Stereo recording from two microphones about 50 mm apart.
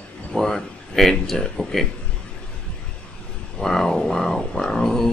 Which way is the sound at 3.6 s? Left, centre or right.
Centre.